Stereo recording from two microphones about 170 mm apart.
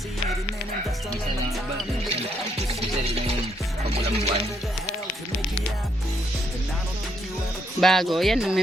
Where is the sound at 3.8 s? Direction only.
35° right (ahead or behind).